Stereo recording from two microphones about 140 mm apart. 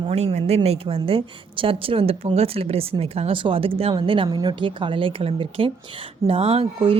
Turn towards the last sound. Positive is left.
turn(degrees=-40)  # may be behind; listen again after turning